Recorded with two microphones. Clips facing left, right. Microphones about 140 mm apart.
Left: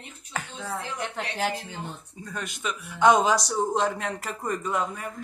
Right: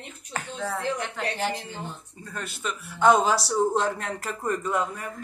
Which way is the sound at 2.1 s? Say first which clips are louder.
Left 1 dB; 5° left (ahead or behind).